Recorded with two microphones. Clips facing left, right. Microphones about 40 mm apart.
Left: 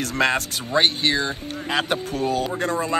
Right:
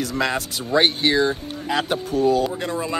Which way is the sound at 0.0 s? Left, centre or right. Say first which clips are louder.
Left 2 dB; left.